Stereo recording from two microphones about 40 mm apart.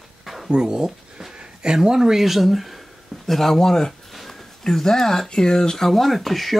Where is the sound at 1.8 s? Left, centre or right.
Centre.